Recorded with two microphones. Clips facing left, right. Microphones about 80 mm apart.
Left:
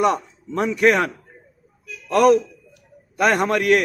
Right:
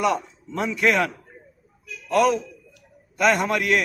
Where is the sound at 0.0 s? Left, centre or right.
Left.